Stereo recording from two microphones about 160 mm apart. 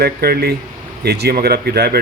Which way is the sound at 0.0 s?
75° right (ahead or behind).